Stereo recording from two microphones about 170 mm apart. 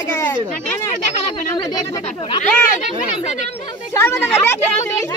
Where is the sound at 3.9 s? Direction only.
15° left (ahead or behind).